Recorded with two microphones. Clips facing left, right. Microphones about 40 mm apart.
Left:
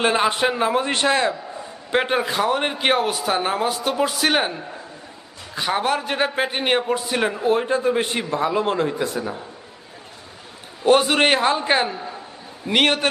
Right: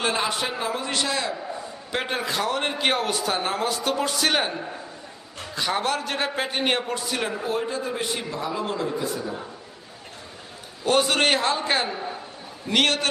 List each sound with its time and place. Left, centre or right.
0.0 s a man's voice: left
1.9 s a man's voice: left
5.5 s a man's voice: centre; by 9.3 s left
10.8 s a man's voice: centre